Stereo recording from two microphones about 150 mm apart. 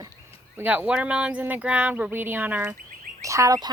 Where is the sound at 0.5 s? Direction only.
10° right (ahead or behind).